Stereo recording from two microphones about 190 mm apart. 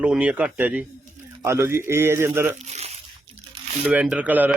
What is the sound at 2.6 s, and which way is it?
Speech, 35° right (ahead or behind).